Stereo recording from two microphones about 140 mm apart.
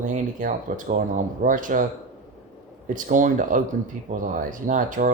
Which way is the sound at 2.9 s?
70° right (ahead or behind).